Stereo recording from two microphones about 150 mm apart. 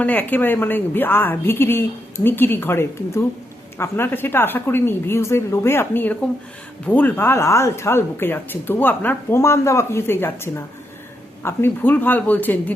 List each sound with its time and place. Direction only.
0.0 s speech: 10° left (ahead or behind)